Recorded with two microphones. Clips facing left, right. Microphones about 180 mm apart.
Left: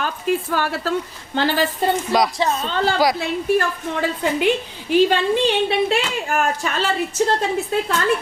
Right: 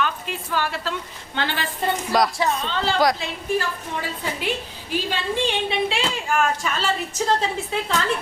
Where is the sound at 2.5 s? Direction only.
45° left (ahead or behind).